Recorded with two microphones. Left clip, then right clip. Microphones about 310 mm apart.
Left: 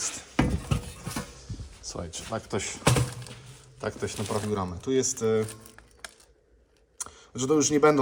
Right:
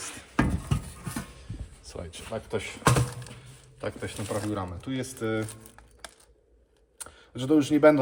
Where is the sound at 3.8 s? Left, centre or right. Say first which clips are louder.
Left 2 dB; centre.